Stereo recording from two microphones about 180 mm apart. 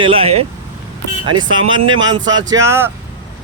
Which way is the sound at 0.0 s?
30° right (ahead or behind).